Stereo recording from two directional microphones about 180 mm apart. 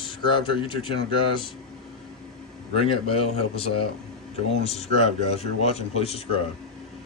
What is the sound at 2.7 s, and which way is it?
Speech, 30° left (ahead or behind).